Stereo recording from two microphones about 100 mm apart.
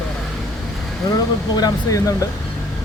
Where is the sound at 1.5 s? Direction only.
40° left (ahead or behind).